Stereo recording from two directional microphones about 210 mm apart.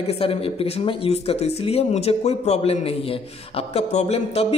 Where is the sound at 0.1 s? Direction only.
25° left (ahead or behind).